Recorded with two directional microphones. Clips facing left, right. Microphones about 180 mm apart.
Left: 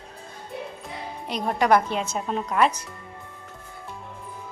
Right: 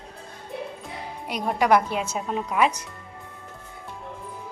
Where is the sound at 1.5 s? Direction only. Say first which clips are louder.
Even; 5° right (ahead or behind).